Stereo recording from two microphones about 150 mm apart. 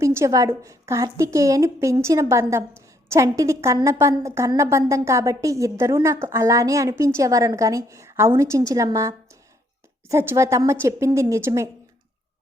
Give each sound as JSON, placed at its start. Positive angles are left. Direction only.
{"t": 0.0, "sound": "a woman's voice", "side_deg": -20}